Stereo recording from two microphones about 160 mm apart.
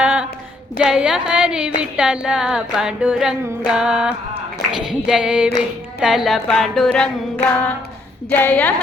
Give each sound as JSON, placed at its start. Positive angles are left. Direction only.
{"t": 0.0, "sound": "a sound", "side_deg": -5}
{"t": 0.8, "sound": "music", "side_deg": -5}
{"t": 7.5, "sound": "a woman's voice", "side_deg": 10}